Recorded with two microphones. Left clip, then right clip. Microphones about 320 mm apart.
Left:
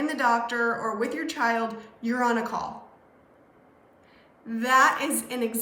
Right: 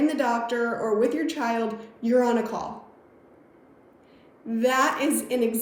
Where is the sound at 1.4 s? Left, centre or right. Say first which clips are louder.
Left 3 dB; left.